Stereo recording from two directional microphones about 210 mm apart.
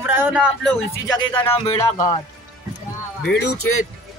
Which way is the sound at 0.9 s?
10° left (ahead or behind).